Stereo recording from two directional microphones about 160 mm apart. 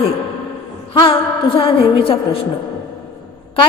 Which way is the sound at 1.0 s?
35° left (ahead or behind).